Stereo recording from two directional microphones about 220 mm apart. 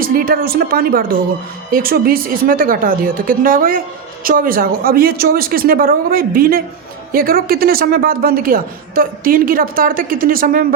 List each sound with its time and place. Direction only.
0.0 s a woman's voice: 45° right (ahead or behind)